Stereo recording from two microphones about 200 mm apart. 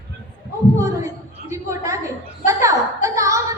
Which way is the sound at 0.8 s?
15° right (ahead or behind).